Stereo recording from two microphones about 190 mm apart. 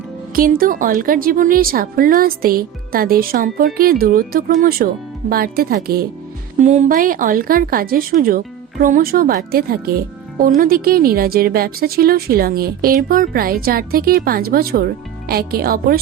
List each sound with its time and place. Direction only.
0.3 s speech: 50° right (ahead or behind)
6.6 s speech: 40° right (ahead or behind)